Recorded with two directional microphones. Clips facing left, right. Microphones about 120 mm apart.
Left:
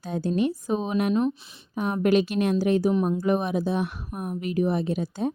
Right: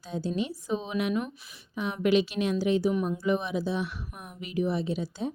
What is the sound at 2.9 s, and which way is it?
Speech, 30° left (ahead or behind).